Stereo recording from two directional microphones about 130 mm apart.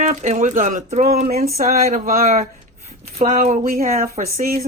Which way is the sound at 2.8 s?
60° right (ahead or behind).